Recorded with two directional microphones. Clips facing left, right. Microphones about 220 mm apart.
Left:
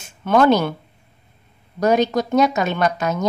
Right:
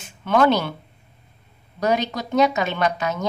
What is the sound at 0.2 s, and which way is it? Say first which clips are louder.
Speech: left 3 dB; 45° left (ahead or behind).